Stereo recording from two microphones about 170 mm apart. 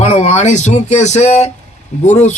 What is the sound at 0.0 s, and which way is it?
Speech, 45° left (ahead or behind).